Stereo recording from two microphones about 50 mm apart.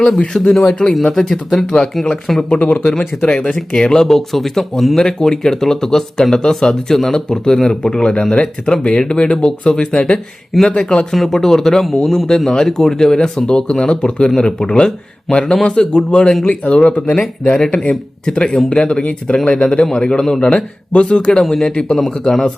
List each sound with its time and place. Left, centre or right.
0.3 s speech: centre
2.6 s speech: left
3.2 s speech: centre
11.1 s speech: centre